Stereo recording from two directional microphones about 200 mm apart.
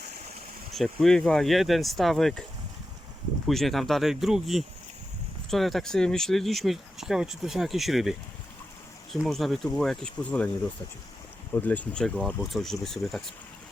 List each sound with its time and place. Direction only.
0.7 s speech: centre (ahead or behind)
3.4 s speech: centre (ahead or behind)
9.2 s speech: centre (ahead or behind)
11.5 s speech: 10° left (ahead or behind)